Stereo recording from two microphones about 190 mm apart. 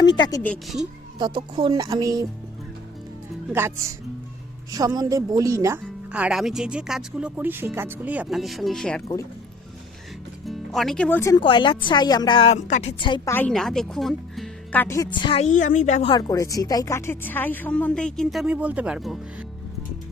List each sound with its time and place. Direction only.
0.0 s a woman's voice: 25° left (ahead or behind)
0.4 s speech: 5° left (ahead or behind)
1.2 s speech: 25° right (ahead or behind)
4.7 s speech: 20° right (ahead or behind)
6.1 s speech: 5° right (ahead or behind)
10.4 s speech: centre (ahead or behind)
11.3 s a woman's voice: 25° left (ahead or behind)
12.5 s speech: 40° left (ahead or behind)
13.0 s a woman's voice: 25° left (ahead or behind)
13.3 s speech: 5° left (ahead or behind); by 16.1 s 35° left (ahead or behind)
16.1 s speech: 20° left (ahead or behind); by 19.5 s centre (ahead or behind)